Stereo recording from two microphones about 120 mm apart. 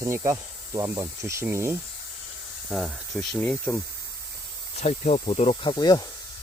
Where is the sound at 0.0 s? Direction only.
25° right (ahead or behind).